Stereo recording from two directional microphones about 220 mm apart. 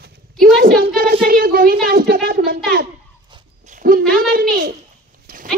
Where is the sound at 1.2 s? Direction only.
40° right (ahead or behind).